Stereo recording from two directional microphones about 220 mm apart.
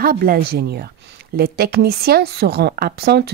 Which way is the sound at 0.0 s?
40° right (ahead or behind).